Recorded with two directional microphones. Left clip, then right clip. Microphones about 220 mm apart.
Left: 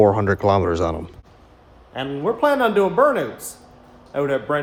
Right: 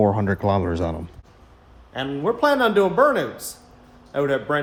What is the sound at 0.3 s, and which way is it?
Speech, 40° left (ahead or behind).